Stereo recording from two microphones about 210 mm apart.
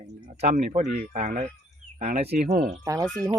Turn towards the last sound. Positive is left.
turn(degrees=-15)  # may be behind; listen again after turning